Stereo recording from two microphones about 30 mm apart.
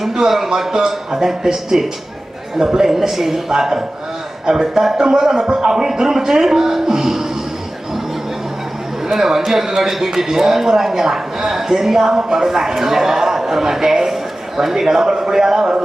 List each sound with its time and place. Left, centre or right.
0.0 s speech: centre
4.9 s speech: right
9.0 s speech: centre